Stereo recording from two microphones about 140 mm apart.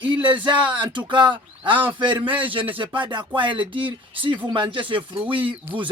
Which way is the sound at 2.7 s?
35° right (ahead or behind).